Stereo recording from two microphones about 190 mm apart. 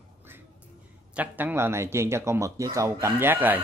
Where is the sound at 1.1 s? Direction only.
10° right (ahead or behind).